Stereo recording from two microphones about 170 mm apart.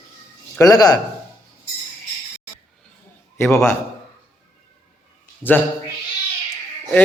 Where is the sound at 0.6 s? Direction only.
20° left (ahead or behind).